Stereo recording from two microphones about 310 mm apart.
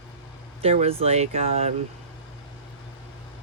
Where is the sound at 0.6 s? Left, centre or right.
Centre.